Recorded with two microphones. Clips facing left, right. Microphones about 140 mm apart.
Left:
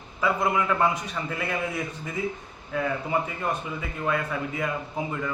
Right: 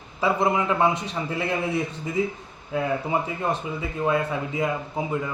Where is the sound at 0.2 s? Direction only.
30° right (ahead or behind).